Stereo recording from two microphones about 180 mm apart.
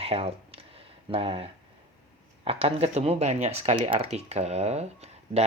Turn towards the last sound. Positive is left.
turn(degrees=-35)  # may be behind; listen again after turning